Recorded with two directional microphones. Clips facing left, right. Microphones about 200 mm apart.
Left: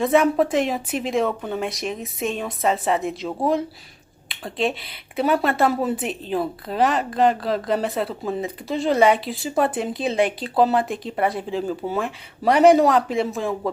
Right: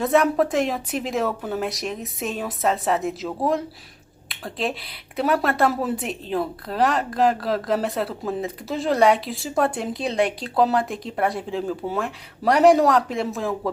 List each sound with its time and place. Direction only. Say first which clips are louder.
0.0 s a woman's voice: left 1 dB; centre (ahead or behind)